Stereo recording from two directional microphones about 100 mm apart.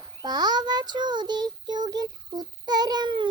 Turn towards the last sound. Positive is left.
turn(degrees=-50)  # may be behind; listen again after turning